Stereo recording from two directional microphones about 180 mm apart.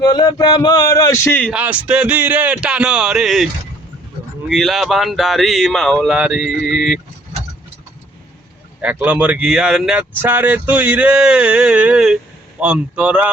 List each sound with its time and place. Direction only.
0.1 s speech: 20° left (ahead or behind)
1.5 s speech: 5° right (ahead or behind)
8.8 s speech: 10° right (ahead or behind)